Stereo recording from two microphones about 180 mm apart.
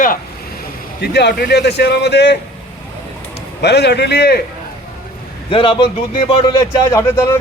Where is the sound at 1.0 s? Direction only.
65° left (ahead or behind).